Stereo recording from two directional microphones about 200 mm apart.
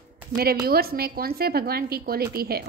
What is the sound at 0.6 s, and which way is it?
Speech, 50° right (ahead or behind).